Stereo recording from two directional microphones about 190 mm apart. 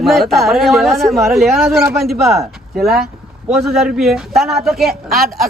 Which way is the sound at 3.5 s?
Centre (ahead or behind).